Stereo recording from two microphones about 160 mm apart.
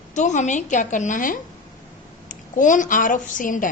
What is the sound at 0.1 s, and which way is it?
A woman's voice, 50° left (ahead or behind).